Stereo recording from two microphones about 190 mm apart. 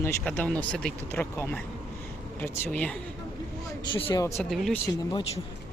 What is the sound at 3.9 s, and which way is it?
Speech, 30° left (ahead or behind).